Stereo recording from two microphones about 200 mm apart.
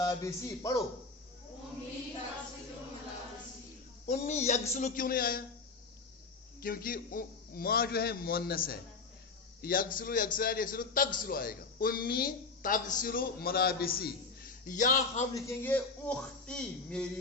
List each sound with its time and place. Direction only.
0.0 s a man's voice: 20° left (ahead or behind)
4.0 s a man's voice: 35° left (ahead or behind)
6.6 s speech: 45° left (ahead or behind)
14.7 s a man's voice: 40° left (ahead or behind)
15.4 s speech: 10° left (ahead or behind)